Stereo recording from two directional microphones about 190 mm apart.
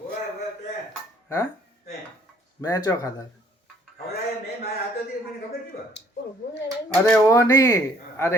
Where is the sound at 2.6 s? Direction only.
20° left (ahead or behind).